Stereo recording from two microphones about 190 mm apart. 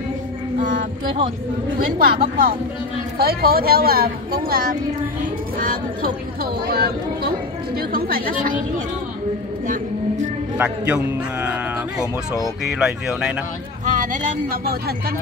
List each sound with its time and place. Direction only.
0.6 s music: 45° right (ahead or behind)
2.0 s speech: 50° right (ahead or behind)
6.4 s speech: 55° right (ahead or behind)
11.4 s speech: 5° right (ahead or behind)
13.8 s speech: 45° right (ahead or behind)